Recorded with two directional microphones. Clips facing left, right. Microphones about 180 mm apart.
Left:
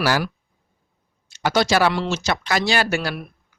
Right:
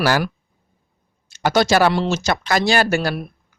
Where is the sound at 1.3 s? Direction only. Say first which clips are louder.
Right 3 dB; 50° right (ahead or behind).